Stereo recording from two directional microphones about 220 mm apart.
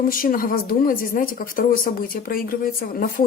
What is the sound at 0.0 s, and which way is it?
Speech, 40° left (ahead or behind).